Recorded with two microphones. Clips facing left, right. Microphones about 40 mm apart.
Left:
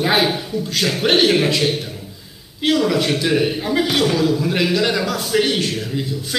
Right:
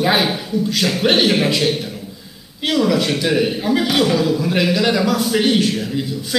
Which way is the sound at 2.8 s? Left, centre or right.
Centre.